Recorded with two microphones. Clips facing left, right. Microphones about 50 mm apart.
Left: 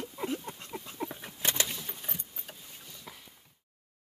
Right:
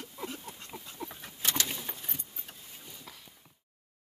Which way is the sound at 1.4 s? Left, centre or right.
Left.